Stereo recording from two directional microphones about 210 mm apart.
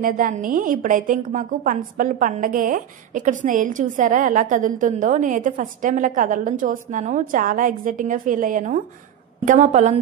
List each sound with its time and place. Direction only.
0.0 s a woman's voice: 40° right (ahead or behind)